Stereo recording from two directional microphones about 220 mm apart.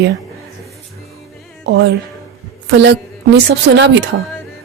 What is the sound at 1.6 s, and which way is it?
A woman's voice, 50° right (ahead or behind).